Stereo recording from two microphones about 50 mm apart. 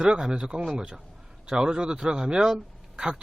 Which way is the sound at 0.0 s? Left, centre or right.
Centre.